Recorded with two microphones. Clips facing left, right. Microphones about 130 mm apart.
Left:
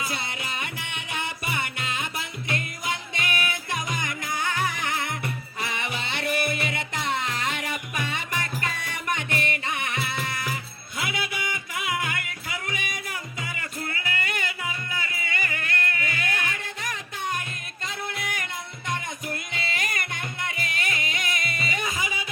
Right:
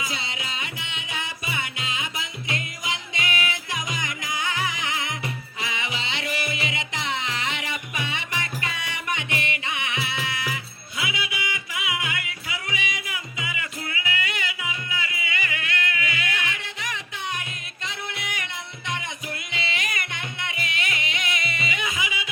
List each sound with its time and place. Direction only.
0.0 s music: 55° left (ahead or behind)